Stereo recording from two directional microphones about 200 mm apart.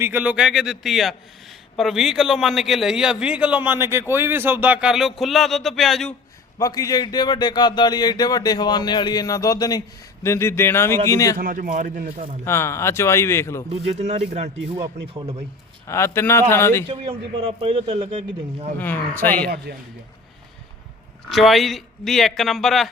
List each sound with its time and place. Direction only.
0.0 s a man's voice: 10° right (ahead or behind)
6.6 s a man's voice: 15° left (ahead or behind)
11.3 s a man's voice: 45° right (ahead or behind)
12.5 s a man's voice: 15° left (ahead or behind)
13.7 s a man's voice: 35° right (ahead or behind)
15.9 s a man's voice: 15° left (ahead or behind)
17.6 s a man's voice: 25° right (ahead or behind)
18.8 s a man's voice: 10° left (ahead or behind)
19.7 s a man's voice: 50° right (ahead or behind)
21.2 s a man's voice: centre (ahead or behind)